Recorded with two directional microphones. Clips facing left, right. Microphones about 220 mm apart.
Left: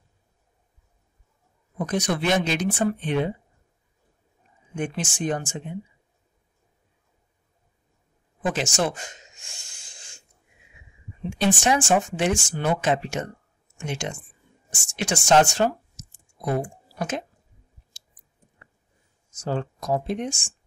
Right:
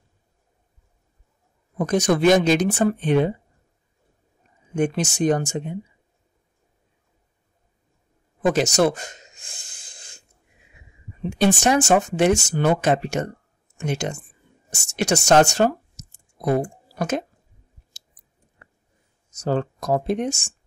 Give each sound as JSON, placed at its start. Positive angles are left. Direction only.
{"t": 1.8, "sound": "speech", "side_deg": -45}
{"t": 4.7, "sound": "speech", "side_deg": -40}
{"t": 8.4, "sound": "speech", "side_deg": -40}
{"t": 9.7, "sound": "snort", "side_deg": -35}
{"t": 11.2, "sound": "speech", "side_deg": -40}
{"t": 15.2, "sound": "a sound", "side_deg": -40}
{"t": 19.3, "sound": "speech", "side_deg": -40}